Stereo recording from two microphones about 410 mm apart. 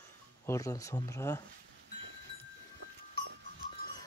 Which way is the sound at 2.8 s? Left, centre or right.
Right.